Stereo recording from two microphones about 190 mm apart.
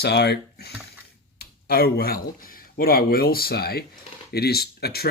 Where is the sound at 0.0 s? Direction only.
60° left (ahead or behind).